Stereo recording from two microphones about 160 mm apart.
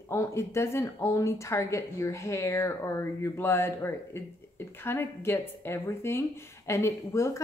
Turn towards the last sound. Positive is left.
turn(degrees=20)  # may be behind; listen again after turning